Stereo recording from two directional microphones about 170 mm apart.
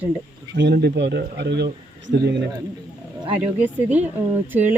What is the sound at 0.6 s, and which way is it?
A man's voice, 80° right.